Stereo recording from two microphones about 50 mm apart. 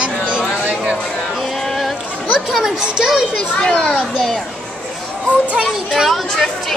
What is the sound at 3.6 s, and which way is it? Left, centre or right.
Speech, centre.